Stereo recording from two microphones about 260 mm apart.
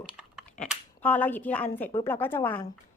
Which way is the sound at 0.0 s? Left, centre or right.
Centre.